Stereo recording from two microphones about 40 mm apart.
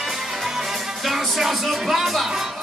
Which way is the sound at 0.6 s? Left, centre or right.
Centre.